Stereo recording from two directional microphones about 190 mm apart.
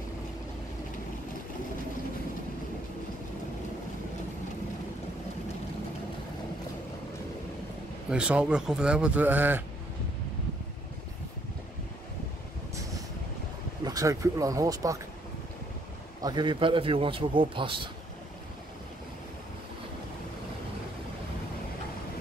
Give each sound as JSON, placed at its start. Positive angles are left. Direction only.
{"t": 8.1, "sound": "speech", "side_deg": -5}
{"t": 13.8, "sound": "speech", "side_deg": -15}
{"t": 16.2, "sound": "a man's voice", "side_deg": -20}